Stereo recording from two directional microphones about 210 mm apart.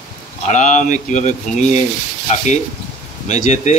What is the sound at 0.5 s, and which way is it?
Speech, 35° left (ahead or behind).